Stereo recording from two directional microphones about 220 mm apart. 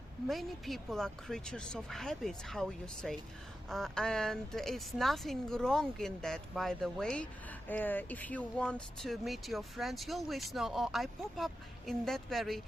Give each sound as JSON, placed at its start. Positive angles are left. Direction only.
{"t": 0.3, "sound": "speech", "side_deg": 0}